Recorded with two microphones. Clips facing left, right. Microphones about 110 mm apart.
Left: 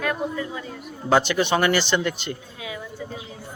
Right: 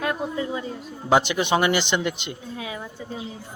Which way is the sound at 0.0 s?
25° right (ahead or behind).